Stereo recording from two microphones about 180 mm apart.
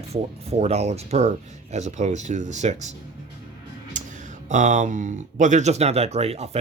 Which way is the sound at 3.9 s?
45° right (ahead or behind).